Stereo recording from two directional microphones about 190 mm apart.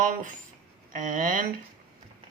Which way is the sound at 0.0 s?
45° right (ahead or behind).